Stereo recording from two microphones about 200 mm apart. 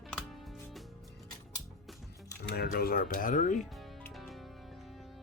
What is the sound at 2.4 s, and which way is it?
Speech, 50° left (ahead or behind).